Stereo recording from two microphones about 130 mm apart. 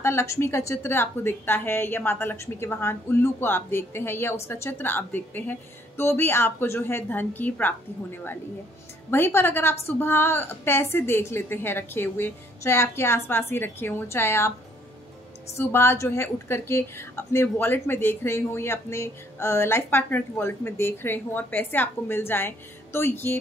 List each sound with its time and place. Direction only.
0.0 s a woman's voice: 20° left (ahead or behind)
9.1 s a woman's voice: 15° left (ahead or behind)
15.5 s a woman's voice: 20° left (ahead or behind)